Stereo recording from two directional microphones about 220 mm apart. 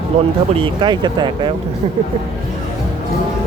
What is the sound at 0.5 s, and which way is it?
Speech, 20° right (ahead or behind).